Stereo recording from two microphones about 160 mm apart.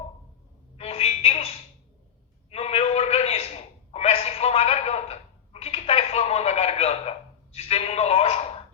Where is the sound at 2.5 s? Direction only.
40° left (ahead or behind).